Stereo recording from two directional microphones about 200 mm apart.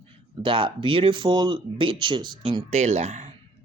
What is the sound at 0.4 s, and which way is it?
Speech, 25° right (ahead or behind).